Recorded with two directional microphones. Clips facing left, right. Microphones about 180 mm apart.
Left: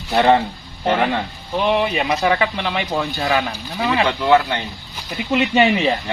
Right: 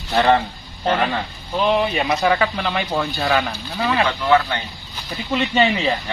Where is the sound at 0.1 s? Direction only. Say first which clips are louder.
Left 2 dB; 15° left (ahead or behind).